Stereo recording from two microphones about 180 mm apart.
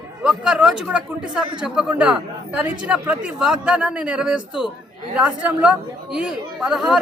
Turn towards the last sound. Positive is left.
turn(degrees=0)  # may be behind; listen again after turning